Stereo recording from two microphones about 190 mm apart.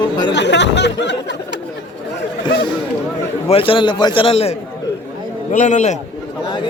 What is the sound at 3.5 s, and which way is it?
Speech, 30° left (ahead or behind).